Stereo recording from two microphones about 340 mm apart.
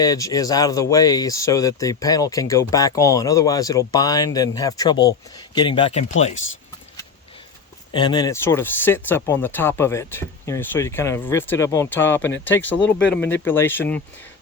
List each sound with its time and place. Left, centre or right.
0.0 s speech: centre
7.9 s speech: centre